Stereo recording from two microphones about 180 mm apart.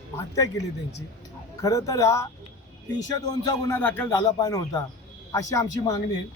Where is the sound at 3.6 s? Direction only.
10° left (ahead or behind).